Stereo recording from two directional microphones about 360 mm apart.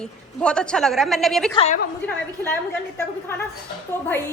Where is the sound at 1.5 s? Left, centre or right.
Centre.